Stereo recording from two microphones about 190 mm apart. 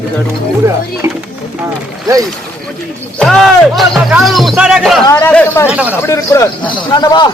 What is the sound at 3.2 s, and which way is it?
Speech, centre (ahead or behind).